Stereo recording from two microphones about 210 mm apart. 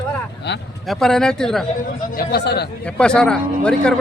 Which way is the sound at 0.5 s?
55° left (ahead or behind).